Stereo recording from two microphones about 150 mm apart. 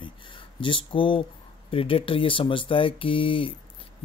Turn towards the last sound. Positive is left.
turn(degrees=35)  # may be behind; listen again after turning